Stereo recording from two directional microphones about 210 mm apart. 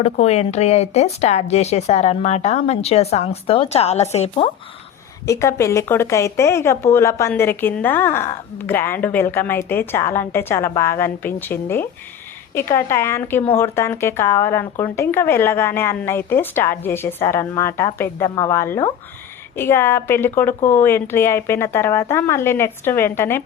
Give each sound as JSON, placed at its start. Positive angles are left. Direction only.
{"t": 0.0, "sound": "speech", "side_deg": 30}
{"t": 5.2, "sound": "speech", "side_deg": 15}